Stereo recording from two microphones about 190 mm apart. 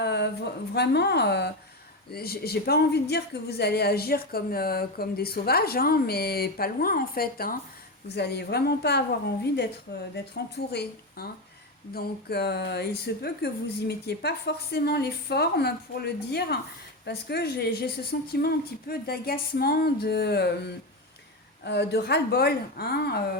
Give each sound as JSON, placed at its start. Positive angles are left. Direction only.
{"t": 0.0, "sound": "a sound", "side_deg": 65}
{"t": 0.7, "sound": "a woman's voice", "side_deg": 60}
{"t": 21.6, "sound": "a woman's voice", "side_deg": 60}